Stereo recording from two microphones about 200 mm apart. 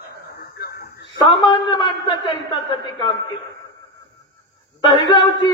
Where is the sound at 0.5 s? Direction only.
50° left (ahead or behind).